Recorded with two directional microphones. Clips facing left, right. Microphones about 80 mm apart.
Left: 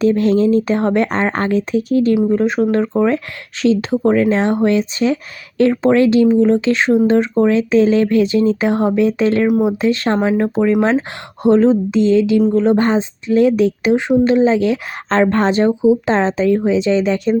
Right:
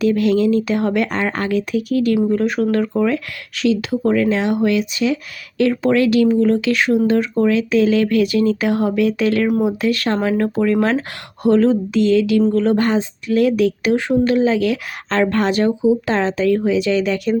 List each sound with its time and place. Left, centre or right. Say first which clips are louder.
0.0 s speech: left 2 dB; left
2.1 s speech: left 2 dB; centre